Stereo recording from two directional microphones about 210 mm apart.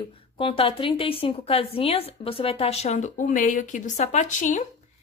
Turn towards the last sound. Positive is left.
turn(degrees=35)  # may be behind; listen again after turning